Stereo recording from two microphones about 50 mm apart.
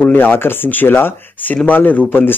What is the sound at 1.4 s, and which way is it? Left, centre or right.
Speech, left.